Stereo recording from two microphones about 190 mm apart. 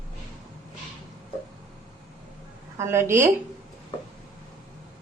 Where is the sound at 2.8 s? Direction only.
10° right (ahead or behind).